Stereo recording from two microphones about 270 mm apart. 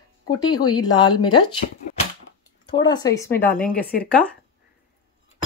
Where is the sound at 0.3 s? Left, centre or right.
Centre.